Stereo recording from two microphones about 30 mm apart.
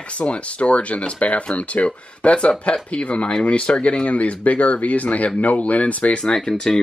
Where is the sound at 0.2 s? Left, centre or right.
Left.